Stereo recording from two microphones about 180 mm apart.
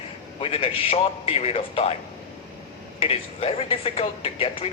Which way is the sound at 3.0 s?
35° left (ahead or behind).